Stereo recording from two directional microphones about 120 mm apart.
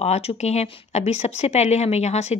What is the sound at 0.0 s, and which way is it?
Speech, 60° left (ahead or behind).